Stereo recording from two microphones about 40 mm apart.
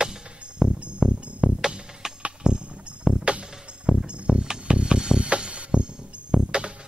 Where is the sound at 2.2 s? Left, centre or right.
Right.